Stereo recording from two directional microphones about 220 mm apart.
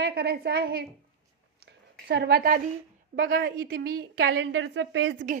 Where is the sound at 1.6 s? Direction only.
50° right (ahead or behind).